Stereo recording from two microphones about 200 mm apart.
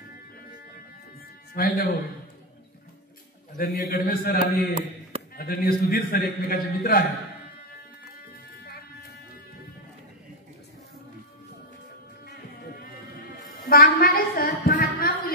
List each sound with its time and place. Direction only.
1.5 s a man's voice: 45° left (ahead or behind)
3.5 s a man's voice: 45° left (ahead or behind)
4.4 s a man's voice: 30° right (ahead or behind)
5.3 s a man's voice: 50° left (ahead or behind)
13.7 s a sound: 45° left (ahead or behind)